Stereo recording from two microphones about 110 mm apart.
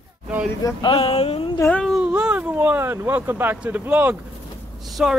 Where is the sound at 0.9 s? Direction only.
60° left (ahead or behind).